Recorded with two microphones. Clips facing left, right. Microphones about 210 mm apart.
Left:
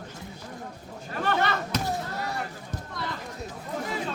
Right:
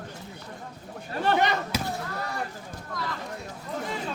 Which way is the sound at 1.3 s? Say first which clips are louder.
Right 1 dB; 15° right (ahead or behind).